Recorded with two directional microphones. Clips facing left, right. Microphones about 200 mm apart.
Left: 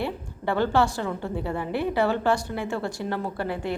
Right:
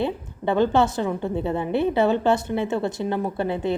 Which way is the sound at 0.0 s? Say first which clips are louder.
Right 4 dB; 20° right (ahead or behind).